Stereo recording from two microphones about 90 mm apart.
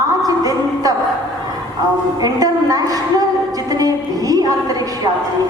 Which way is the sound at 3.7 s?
45° right (ahead or behind).